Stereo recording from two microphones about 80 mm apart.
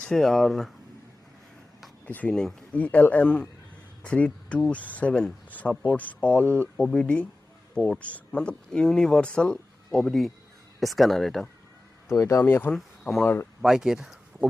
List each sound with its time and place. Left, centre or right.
0.0 s speech: centre
2.0 s speech: centre
12.1 s speech: left
12.5 s speech: left
12.7 s speech: centre
13.2 s speech: left
13.6 s speech: centre